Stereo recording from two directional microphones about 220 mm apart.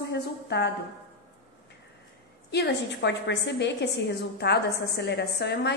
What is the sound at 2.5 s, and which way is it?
A woman's voice, 50° left (ahead or behind).